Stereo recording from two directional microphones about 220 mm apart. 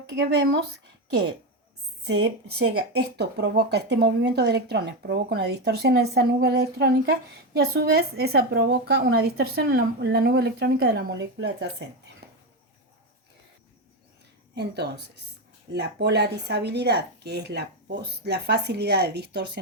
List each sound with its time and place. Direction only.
0.2 s speech: 50° right (ahead or behind)
2.0 s speech: 50° right (ahead or behind)
14.5 s speech: 50° right (ahead or behind)